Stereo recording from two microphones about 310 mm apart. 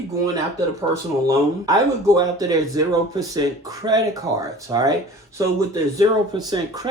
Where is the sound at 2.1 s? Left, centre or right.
Centre.